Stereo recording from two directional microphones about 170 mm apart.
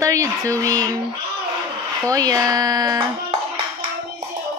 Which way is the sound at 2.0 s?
20° right (ahead or behind).